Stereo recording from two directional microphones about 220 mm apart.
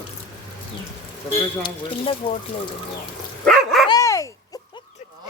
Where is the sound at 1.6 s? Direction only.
25° left (ahead or behind).